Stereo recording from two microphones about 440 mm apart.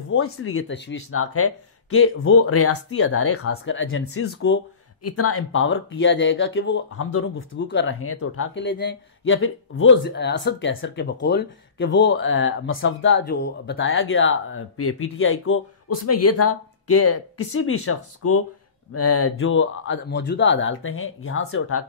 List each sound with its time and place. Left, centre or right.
0.1 s speech: left